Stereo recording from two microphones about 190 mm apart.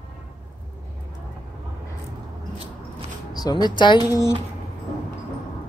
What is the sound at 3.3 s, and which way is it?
Speech, 20° left (ahead or behind).